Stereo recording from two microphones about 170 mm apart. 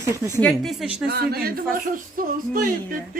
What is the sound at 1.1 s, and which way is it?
Speech, 65° right (ahead or behind).